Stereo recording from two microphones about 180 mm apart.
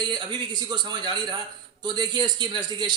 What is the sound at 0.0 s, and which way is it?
A man's voice, 25° right (ahead or behind).